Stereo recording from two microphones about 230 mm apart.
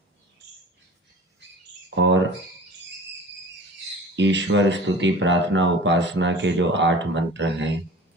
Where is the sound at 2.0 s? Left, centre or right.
Right.